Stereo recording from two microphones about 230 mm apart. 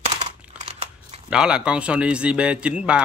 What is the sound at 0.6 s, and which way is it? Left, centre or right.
Crumpling, right.